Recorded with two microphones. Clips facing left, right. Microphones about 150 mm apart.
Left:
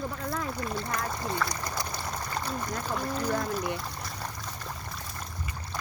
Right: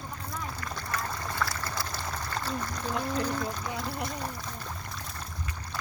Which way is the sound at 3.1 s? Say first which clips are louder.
Left 3 dB; 5° left (ahead or behind).